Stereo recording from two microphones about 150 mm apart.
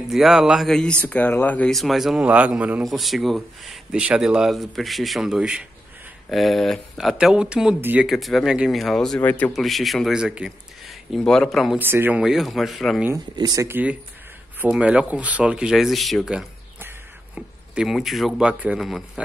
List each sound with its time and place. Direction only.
0.1 s speech: centre (ahead or behind)
11.8 s speech: 15° right (ahead or behind)
12.2 s speech: centre (ahead or behind)
13.4 s speech: 25° right (ahead or behind)
13.7 s speech: 10° right (ahead or behind)
17.7 s speech: centre (ahead or behind)